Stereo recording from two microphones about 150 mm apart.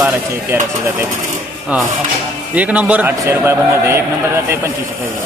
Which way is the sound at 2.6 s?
10° right (ahead or behind).